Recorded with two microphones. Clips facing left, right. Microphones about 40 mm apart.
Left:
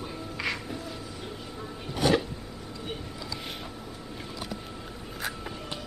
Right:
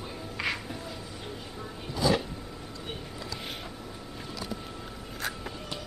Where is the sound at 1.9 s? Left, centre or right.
Left.